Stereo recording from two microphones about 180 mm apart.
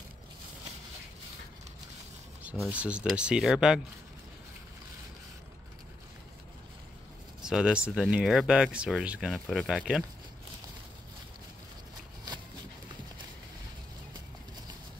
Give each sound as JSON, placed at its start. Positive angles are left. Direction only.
{"t": 2.6, "sound": "speech", "side_deg": -5}
{"t": 7.4, "sound": "speech", "side_deg": -5}